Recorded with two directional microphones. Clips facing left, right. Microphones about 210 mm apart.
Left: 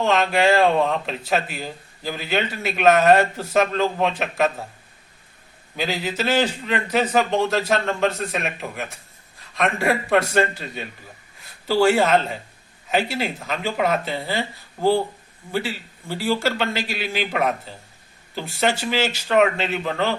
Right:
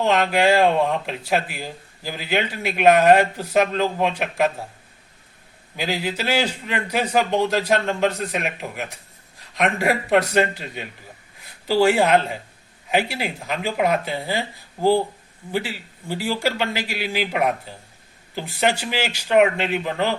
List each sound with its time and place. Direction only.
0.0 s a man's voice: 15° right (ahead or behind)
5.7 s a man's voice: 10° right (ahead or behind)